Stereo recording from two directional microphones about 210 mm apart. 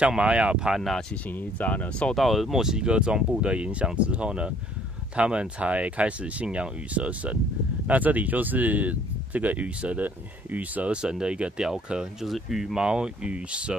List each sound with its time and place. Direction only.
0.0 s speech: 5° right (ahead or behind)